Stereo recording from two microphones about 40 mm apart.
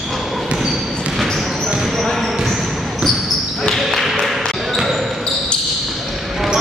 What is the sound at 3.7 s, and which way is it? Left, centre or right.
Basketball bounce, centre.